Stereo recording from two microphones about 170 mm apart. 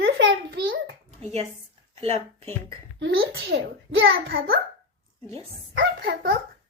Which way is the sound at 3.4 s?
90° right.